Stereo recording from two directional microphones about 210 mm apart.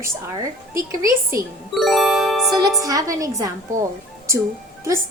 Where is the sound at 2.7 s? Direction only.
15° right (ahead or behind).